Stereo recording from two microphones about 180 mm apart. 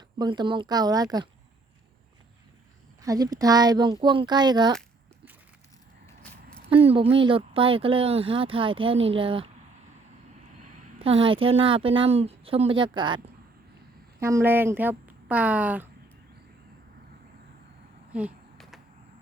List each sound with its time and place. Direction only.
0.2 s speech: 25° right (ahead or behind)
3.0 s speech: 20° right (ahead or behind)
6.7 s speech: 30° right (ahead or behind)
11.0 s speech: 30° right (ahead or behind)
14.2 s speech: 15° right (ahead or behind)
18.1 s a sound: 5° right (ahead or behind)